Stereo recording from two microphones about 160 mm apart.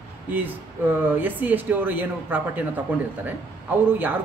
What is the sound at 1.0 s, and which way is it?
Speech, 10° right (ahead or behind).